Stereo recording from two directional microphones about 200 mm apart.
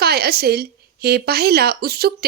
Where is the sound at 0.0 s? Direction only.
50° right (ahead or behind).